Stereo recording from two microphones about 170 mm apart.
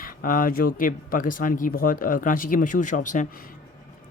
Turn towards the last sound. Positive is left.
turn(degrees=50)  # may be behind; listen again after turning